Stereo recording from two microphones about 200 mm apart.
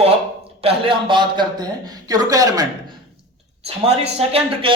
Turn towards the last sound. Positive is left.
turn(degrees=-30)  # may be behind; listen again after turning